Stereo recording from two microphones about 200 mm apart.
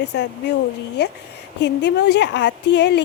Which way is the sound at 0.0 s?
60° left (ahead or behind).